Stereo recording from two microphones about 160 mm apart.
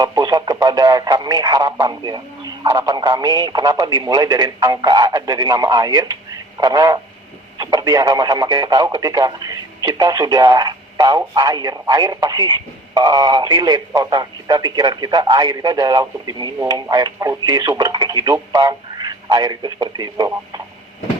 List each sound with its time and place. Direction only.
0.0 s speech: 25° right (ahead or behind)